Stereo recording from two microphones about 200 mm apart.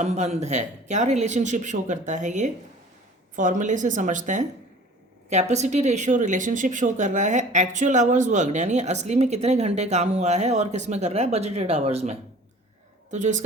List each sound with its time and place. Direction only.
0.0 s speech: 35° right (ahead or behind)